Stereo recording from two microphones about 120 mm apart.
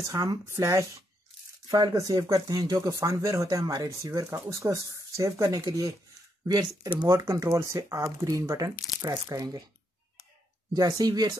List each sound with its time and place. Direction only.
0.0 s speech: 30° right (ahead or behind)
7.1 s speech: 30° right (ahead or behind)
10.7 s speech: 30° right (ahead or behind)